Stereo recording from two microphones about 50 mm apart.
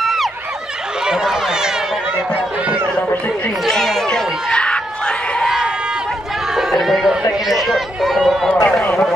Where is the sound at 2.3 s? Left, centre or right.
Right.